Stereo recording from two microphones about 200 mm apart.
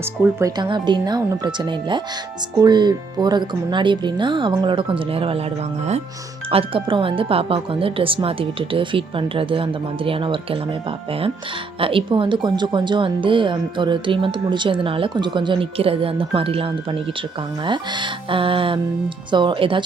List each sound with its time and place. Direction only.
0.3 s speech: 20° right (ahead or behind)
6.5 s speech: 25° right (ahead or behind)
11.8 s speech: 25° right (ahead or behind)